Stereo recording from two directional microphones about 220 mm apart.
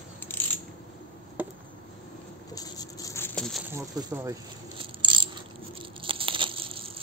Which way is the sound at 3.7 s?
15° right (ahead or behind).